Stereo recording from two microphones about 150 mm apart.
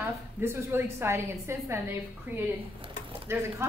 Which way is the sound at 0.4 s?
15° right (ahead or behind).